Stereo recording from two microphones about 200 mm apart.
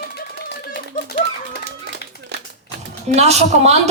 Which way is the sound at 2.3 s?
55° right (ahead or behind).